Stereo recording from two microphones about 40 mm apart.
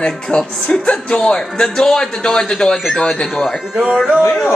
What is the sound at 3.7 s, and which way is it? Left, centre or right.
Music, centre.